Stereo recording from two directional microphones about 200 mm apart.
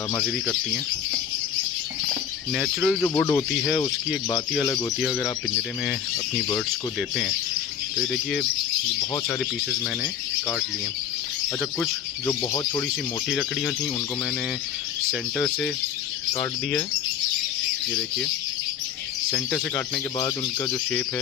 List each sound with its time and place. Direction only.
2.5 s speech: centre (ahead or behind)
7.9 s speech: 5° left (ahead or behind)
12.3 s speech: 15° left (ahead or behind)
13.3 s speech: centre (ahead or behind)
15.4 s speech: 5° left (ahead or behind)
19.3 s speech: 10° left (ahead or behind)
20.1 s speech: 20° left (ahead or behind)